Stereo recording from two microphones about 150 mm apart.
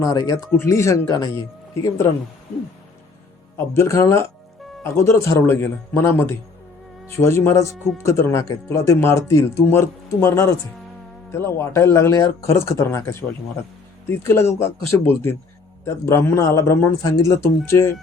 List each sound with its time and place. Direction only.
0.0 s speech: 25° left (ahead or behind)
3.6 s a man's voice: 20° left (ahead or behind)